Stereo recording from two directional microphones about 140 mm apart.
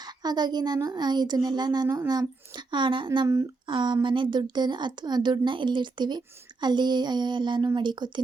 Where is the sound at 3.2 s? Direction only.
20° right (ahead or behind).